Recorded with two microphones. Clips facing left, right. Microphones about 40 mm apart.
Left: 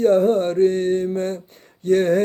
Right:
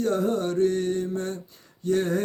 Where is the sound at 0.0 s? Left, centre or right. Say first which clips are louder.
Left 9 dB; left.